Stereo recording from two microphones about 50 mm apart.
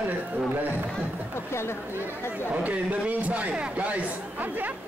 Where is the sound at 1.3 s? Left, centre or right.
Left.